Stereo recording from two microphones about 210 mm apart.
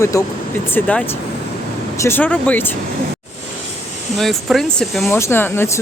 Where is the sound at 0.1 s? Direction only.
15° left (ahead or behind).